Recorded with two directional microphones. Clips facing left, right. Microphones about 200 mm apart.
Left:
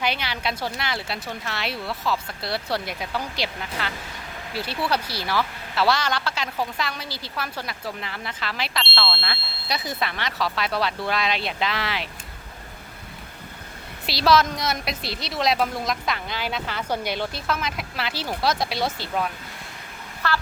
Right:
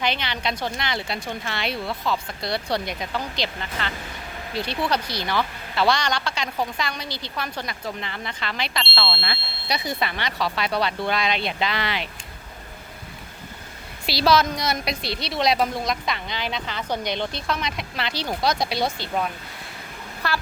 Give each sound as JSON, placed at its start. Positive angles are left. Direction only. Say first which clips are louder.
{"t": 0.0, "sound": "speech", "louder": "right 1 dB", "side_deg": 10}
{"t": 14.1, "sound": "speech", "louder": "even", "side_deg": 0}
{"t": 20.2, "sound": "a woman's voice", "louder": "left 1 dB", "side_deg": -10}